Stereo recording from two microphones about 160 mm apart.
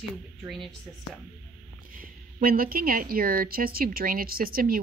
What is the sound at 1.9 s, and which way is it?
A woman's voice, 65° right (ahead or behind).